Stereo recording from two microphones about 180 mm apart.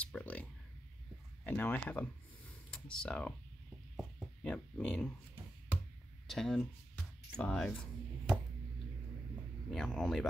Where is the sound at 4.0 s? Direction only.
Centre (ahead or behind).